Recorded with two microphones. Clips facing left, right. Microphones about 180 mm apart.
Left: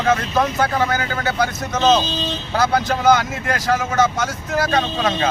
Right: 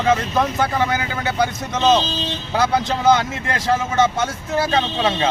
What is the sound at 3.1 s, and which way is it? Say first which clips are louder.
Speech: left 1 dB; 25° right (ahead or behind).